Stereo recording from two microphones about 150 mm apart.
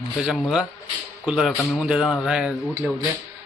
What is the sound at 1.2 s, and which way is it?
Speech, 5° right (ahead or behind).